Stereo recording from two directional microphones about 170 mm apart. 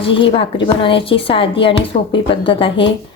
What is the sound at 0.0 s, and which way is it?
Speech, 30° left (ahead or behind).